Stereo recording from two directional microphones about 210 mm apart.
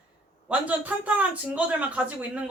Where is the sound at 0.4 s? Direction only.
5° right (ahead or behind).